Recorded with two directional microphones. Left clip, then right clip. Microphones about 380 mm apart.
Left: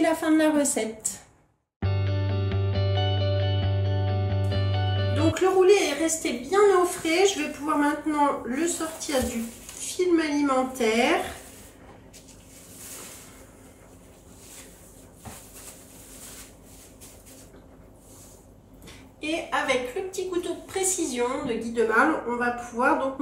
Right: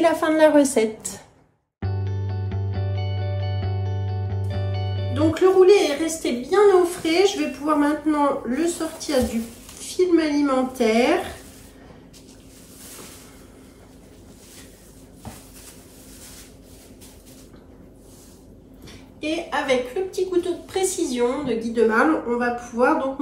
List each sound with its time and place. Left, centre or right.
0.0 s a woman's voice: centre
1.8 s music: centre
9.8 s a woman's voice: centre
19.2 s a woman's voice: centre